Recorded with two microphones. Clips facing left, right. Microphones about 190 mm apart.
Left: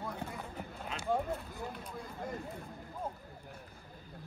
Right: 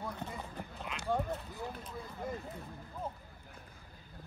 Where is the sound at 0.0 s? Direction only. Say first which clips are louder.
Left 1 dB; centre (ahead or behind).